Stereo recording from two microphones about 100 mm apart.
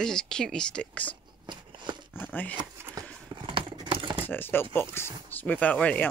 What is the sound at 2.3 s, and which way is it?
Speech, 15° left (ahead or behind).